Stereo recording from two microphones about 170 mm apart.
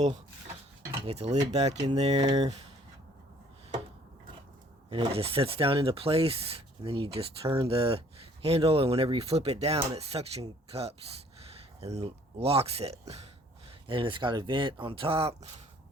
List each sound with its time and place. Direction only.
1.0 s speech: 35° right (ahead or behind)
4.9 s speech: 35° right (ahead or behind)